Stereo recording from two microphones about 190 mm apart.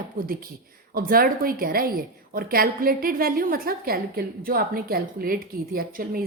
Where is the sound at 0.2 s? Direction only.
50° right (ahead or behind).